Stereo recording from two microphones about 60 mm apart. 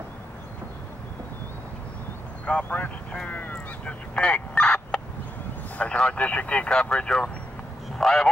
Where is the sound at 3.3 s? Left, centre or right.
Left.